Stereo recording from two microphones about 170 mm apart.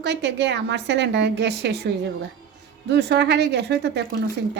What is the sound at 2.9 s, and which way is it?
Speech, 90° right.